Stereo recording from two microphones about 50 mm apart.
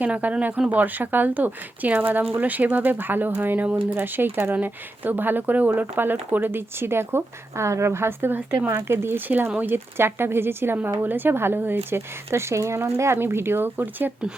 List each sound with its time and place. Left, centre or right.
0.0 s speech: right
11.9 s speech: right